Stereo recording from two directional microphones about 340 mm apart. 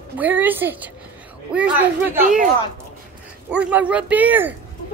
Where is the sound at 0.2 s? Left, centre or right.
Centre.